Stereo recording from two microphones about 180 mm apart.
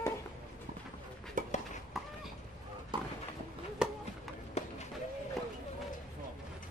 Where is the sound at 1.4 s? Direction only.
45° right (ahead or behind).